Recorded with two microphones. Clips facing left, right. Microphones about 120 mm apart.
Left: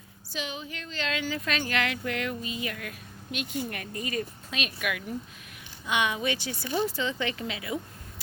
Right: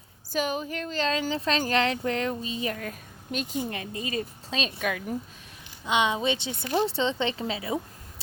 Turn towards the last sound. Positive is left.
turn(degrees=-30)  # may be behind; listen again after turning